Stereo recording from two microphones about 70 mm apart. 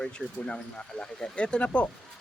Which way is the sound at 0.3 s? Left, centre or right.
Centre.